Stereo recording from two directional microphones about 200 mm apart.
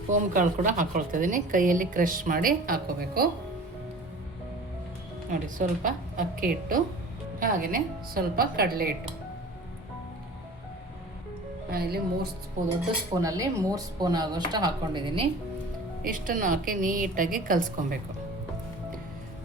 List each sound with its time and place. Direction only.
0.1 s a woman's voice: 40° right (ahead or behind)
5.3 s a woman's voice: 40° right (ahead or behind)
11.7 s a woman's voice: 50° right (ahead or behind)
13.2 s speech: 15° right (ahead or behind)
16.0 s a woman's voice: 40° right (ahead or behind)